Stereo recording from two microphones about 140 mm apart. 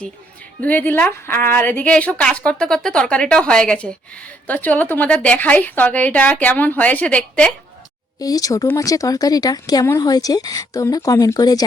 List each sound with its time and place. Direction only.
0.6 s a woman's voice: 10° left (ahead or behind)
8.2 s speech: 25° left (ahead or behind)